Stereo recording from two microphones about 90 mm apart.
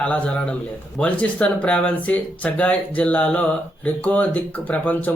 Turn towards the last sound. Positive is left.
turn(degrees=15)  # may be behind; listen again after turning